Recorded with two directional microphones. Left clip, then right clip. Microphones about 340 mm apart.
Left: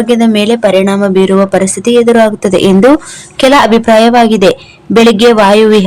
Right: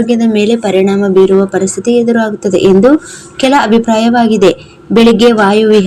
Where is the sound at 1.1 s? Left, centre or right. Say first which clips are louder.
Right 2 dB; left.